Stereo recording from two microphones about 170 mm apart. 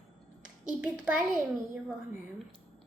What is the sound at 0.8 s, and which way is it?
Speech, 10° right (ahead or behind).